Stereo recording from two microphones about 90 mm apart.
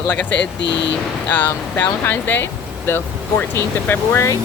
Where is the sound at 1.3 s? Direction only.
20° left (ahead or behind).